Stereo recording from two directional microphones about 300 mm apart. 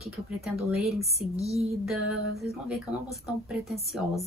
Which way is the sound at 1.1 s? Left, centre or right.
Centre.